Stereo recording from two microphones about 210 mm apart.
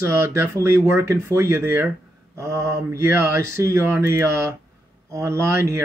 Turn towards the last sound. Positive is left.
turn(degrees=-15)  # may be behind; listen again after turning